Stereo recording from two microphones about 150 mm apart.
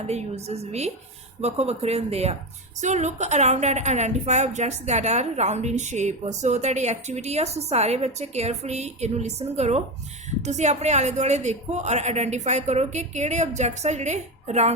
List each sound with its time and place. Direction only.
0.1 s a woman's voice: 45° right (ahead or behind)